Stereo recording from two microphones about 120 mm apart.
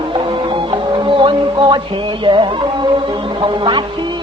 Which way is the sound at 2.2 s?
45° right (ahead or behind).